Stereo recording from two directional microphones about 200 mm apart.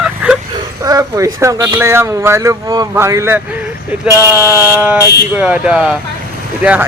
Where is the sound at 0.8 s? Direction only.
15° right (ahead or behind).